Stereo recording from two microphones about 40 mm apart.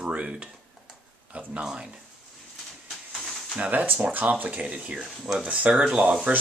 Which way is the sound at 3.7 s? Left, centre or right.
Right.